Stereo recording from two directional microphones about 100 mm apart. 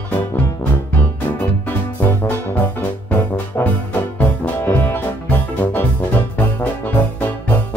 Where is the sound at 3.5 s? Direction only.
20° left (ahead or behind).